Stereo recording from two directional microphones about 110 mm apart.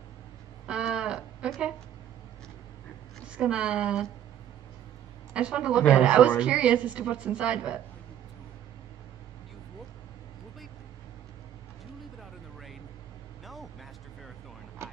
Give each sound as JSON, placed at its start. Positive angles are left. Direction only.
{"t": 0.7, "sound": "a sound", "side_deg": -10}
{"t": 3.3, "sound": "a woman's voice", "side_deg": -10}
{"t": 5.3, "sound": "a woman's voice", "side_deg": -10}